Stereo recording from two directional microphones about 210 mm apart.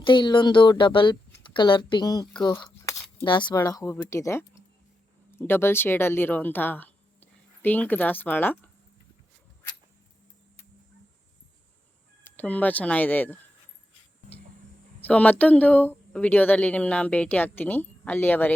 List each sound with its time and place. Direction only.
0.0 s speech: 20° left (ahead or behind)
12.2 s speech: 5° left (ahead or behind)
15.0 s speech: 5° left (ahead or behind)